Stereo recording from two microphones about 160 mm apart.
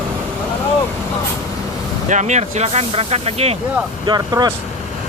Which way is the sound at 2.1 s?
50° right (ahead or behind).